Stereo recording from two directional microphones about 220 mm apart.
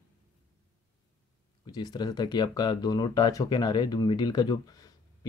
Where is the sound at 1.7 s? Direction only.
15° left (ahead or behind).